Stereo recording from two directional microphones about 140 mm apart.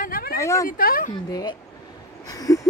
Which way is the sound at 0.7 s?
90° left.